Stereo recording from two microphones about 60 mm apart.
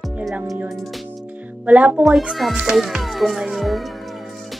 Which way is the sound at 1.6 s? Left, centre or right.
Right.